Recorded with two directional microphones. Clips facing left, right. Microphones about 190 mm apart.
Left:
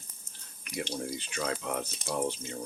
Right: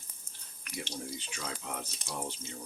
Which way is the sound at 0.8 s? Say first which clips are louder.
Left 6 dB; 65° left (ahead or behind).